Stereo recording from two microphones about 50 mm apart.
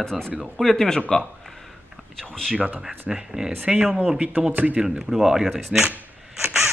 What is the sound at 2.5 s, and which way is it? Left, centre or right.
Speech, right.